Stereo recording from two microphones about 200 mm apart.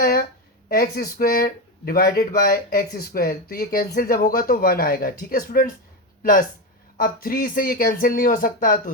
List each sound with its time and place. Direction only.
0.0 s a sound: 50° left (ahead or behind)
0.7 s speech: 45° left (ahead or behind)
6.9 s speech: 45° left (ahead or behind)